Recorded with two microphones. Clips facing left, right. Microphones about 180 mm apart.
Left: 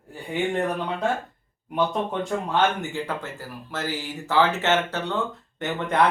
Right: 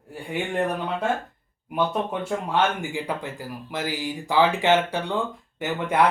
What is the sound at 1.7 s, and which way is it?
Speech, 5° right (ahead or behind).